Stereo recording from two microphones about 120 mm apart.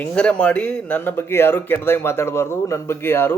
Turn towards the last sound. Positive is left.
turn(degrees=20)  # may be behind; listen again after turning